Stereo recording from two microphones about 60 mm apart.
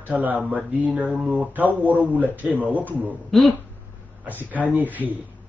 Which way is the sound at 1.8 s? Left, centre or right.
Right.